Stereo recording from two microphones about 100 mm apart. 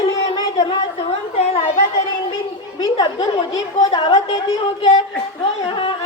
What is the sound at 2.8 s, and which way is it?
Speech, 45° left (ahead or behind).